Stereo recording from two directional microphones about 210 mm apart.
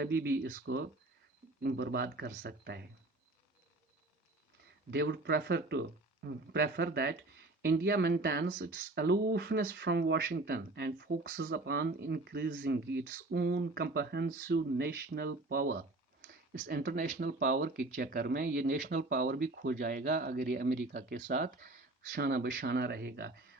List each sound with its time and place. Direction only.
0.2 s speech: 45° right (ahead or behind)
4.9 s speech: 55° right (ahead or behind)